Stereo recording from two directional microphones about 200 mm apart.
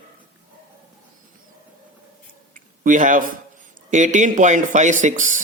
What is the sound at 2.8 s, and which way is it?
Speech, 40° right (ahead or behind).